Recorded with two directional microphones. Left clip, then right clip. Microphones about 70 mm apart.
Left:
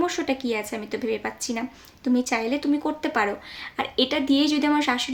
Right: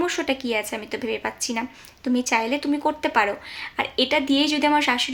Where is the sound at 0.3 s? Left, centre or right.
Centre.